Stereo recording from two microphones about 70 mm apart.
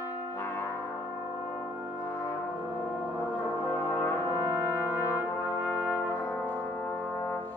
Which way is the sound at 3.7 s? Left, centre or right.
Left.